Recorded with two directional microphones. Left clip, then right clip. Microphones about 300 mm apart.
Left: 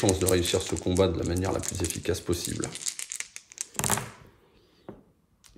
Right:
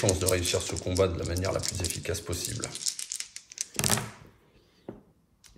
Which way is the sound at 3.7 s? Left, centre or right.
Centre.